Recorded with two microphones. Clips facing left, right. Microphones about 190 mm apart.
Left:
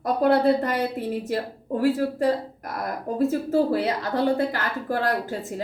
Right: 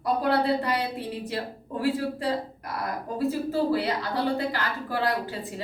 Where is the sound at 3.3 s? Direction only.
50° left (ahead or behind).